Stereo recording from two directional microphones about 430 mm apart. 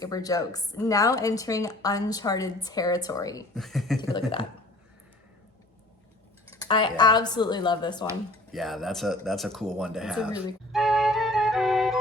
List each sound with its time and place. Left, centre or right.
0.0 s a woman's voice: centre
4.1 s a woman's voice: centre
6.6 s a woman's voice: centre